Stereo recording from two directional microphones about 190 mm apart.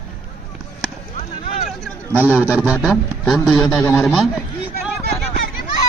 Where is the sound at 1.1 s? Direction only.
35° left (ahead or behind).